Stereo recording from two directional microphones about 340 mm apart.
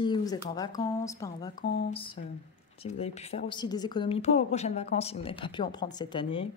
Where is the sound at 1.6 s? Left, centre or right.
Left.